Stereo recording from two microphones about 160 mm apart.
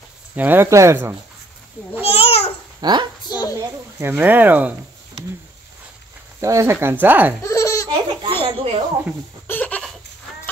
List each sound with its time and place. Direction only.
0.4 s speech: 15° right (ahead or behind)
2.0 s babbling: 40° left (ahead or behind)
2.8 s a child's voice: 25° right (ahead or behind)
3.3 s a sound: 25° left (ahead or behind)
3.5 s speech: 15° right (ahead or behind)
6.4 s speech: 20° right (ahead or behind)
7.4 s laughter: 20° left (ahead or behind)
8.2 s a sound: 30° right (ahead or behind)
9.5 s goat: 10° left (ahead or behind)